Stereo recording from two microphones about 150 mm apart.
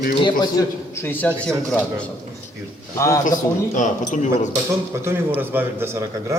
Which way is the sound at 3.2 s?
60° left (ahead or behind).